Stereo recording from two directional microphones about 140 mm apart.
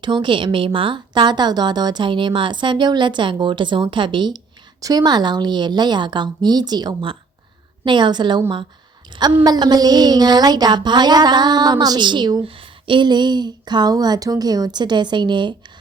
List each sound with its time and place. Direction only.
0.0 s a woman's voice: 35° right (ahead or behind)